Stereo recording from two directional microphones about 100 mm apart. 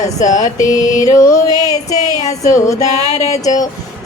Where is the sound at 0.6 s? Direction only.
35° left (ahead or behind).